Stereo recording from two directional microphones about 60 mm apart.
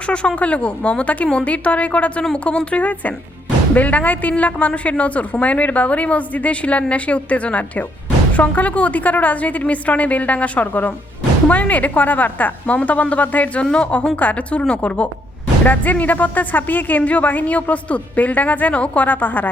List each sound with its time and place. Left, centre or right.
0.1 s a woman's voice: centre